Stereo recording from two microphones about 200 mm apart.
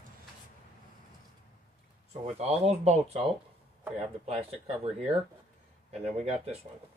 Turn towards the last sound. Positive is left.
turn(degrees=-30)  # may be behind; listen again after turning